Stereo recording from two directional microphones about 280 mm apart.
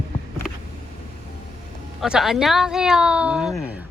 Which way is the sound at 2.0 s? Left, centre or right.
Centre.